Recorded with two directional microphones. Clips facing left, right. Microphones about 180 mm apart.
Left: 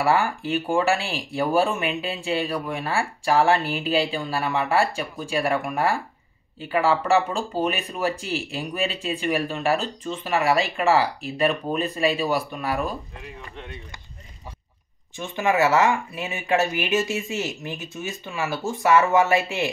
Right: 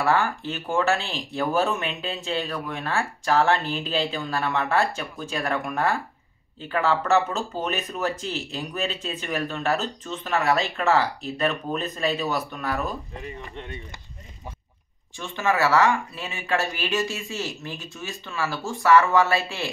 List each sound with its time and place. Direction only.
0.0 s speech: 15° left (ahead or behind)
15.1 s speech: 20° left (ahead or behind)